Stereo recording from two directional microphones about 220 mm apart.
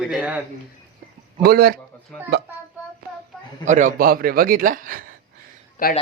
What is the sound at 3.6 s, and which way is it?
A man's voice, 35° right (ahead or behind).